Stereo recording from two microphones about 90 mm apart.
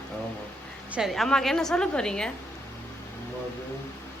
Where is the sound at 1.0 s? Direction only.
Centre (ahead or behind).